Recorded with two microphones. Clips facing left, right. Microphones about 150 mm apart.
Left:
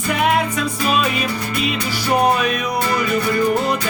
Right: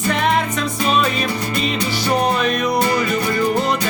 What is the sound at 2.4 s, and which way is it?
Music, 10° left (ahead or behind).